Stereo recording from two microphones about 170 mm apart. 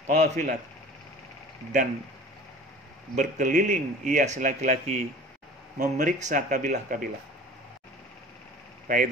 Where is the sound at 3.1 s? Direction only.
45° right (ahead or behind).